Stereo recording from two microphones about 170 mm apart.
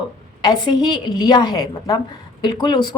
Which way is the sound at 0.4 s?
25° left (ahead or behind).